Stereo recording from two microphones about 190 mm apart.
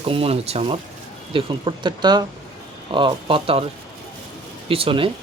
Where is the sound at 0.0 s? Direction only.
30° right (ahead or behind).